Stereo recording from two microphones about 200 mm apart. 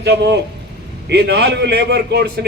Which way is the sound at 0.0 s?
60° right (ahead or behind).